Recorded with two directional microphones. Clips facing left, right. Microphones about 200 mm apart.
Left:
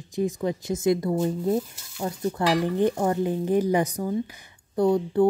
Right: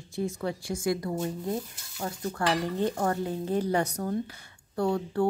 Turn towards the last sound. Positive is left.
turn(degrees=20)  # may be behind; listen again after turning